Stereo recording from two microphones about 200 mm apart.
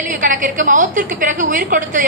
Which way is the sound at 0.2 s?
40° right (ahead or behind).